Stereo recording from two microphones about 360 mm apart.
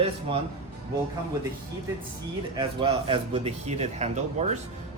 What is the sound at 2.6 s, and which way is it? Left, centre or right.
Speech, centre.